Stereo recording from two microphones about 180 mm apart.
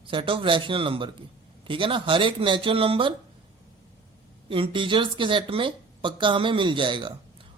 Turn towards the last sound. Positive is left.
turn(degrees=-25)  # may be behind; listen again after turning